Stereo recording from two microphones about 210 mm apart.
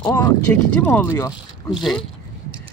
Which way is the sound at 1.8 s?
Centre (ahead or behind).